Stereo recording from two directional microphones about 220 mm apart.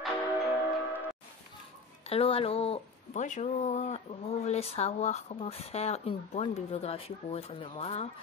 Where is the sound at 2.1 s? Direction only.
25° left (ahead or behind).